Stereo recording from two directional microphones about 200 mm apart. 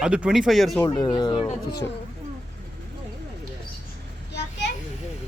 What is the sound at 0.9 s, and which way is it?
Speech, 20° left (ahead or behind).